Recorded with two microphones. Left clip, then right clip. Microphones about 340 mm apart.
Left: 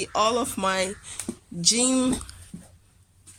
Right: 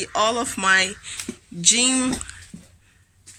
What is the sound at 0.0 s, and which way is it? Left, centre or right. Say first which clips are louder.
A woman's voice: right 2 dB; centre.